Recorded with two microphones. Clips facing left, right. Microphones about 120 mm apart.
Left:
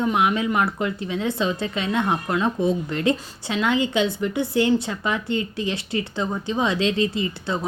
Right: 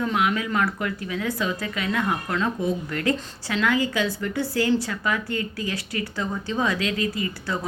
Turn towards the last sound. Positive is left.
turn(degrees=25)  # may be behind; listen again after turning